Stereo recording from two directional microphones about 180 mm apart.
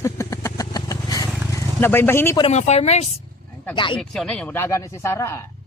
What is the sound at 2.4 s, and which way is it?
Speech, 40° left (ahead or behind).